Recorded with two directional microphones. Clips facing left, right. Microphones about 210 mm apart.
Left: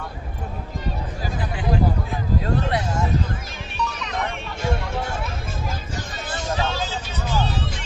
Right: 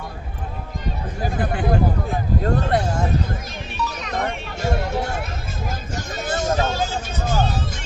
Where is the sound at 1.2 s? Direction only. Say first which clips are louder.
Right 6 dB; 55° right (ahead or behind).